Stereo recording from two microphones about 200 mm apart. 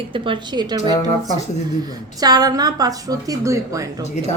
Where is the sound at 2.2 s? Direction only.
20° right (ahead or behind).